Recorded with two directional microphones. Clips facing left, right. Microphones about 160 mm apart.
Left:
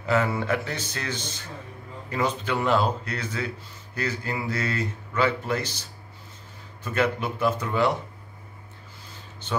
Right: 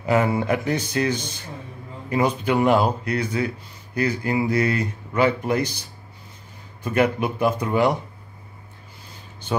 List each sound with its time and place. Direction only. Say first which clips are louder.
0.0 s speech: right 4 dB; 15° right (ahead or behind)